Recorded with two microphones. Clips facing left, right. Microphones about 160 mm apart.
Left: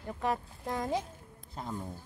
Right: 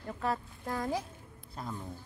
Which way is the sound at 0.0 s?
15° left (ahead or behind).